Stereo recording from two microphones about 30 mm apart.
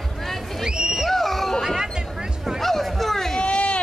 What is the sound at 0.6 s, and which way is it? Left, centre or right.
Music, right.